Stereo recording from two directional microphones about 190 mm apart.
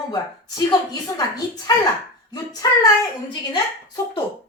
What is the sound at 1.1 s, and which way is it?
A woman's voice, 20° left (ahead or behind).